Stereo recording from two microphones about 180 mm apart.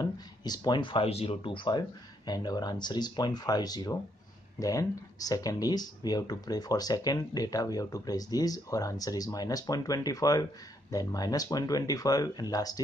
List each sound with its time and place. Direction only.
0.0 s speech: 20° left (ahead or behind)